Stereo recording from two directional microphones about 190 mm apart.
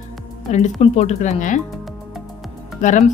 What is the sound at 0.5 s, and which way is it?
Speech, 40° left (ahead or behind).